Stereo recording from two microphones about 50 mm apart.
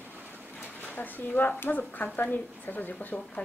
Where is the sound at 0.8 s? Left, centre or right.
Left.